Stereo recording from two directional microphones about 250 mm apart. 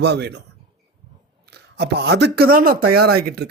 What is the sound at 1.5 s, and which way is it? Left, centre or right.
Speech, right.